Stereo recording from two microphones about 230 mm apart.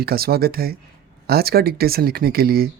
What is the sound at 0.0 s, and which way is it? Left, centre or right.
Speech, right.